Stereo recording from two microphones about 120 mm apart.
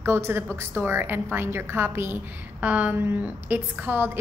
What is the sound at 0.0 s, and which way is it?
A woman's voice, 20° right (ahead or behind).